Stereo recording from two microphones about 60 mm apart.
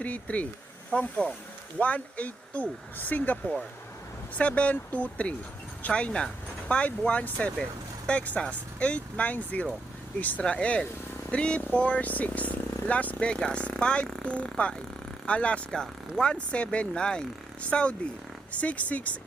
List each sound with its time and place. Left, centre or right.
0.0 s speech: left
4.4 s speech: left